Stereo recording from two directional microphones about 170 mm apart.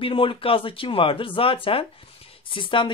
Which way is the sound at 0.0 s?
30° left (ahead or behind).